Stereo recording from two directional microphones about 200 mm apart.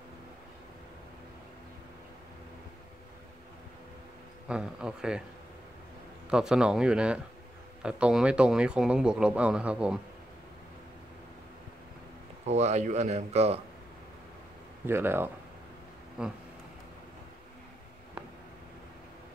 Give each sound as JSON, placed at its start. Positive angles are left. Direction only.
{"t": 4.5, "sound": "speech", "side_deg": -5}
{"t": 6.3, "sound": "speech", "side_deg": -5}
{"t": 12.4, "sound": "speech", "side_deg": -35}
{"t": 14.9, "sound": "speech", "side_deg": -10}